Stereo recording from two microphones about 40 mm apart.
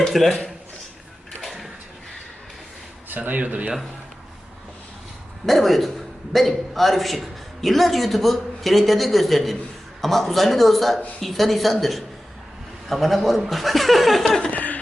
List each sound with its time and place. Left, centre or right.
0.1 s a man's voice: centre
1.4 s a sound: centre
3.4 s speech: right
5.5 s a man's voice: centre
14.5 s laughter: left